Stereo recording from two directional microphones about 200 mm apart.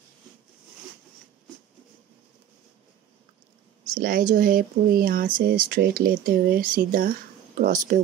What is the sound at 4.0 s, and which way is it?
Speech, 45° right (ahead or behind).